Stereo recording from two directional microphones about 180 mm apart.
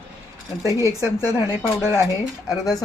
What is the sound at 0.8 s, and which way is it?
Speech, 15° left (ahead or behind).